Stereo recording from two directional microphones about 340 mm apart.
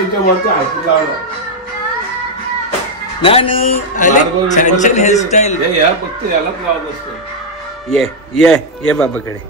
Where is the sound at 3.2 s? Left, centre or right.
Centre.